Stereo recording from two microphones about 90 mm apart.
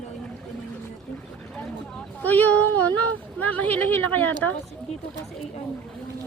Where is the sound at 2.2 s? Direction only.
20° left (ahead or behind).